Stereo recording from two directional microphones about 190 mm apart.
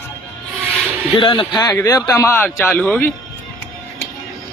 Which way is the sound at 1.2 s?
25° left (ahead or behind).